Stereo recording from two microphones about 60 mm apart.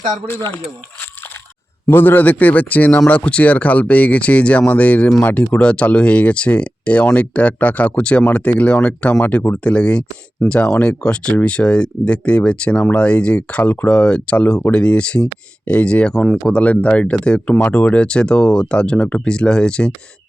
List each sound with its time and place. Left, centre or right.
1.9 s speech: left
9.2 s speech: left
9.6 s speech: centre